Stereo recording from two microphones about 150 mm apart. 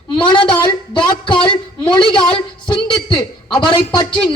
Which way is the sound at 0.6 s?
35° left (ahead or behind).